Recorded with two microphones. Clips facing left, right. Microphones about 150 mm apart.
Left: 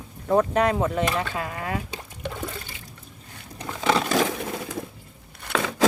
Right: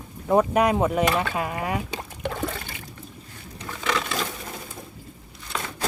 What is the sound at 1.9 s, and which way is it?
Toilet flush, 65° right (ahead or behind).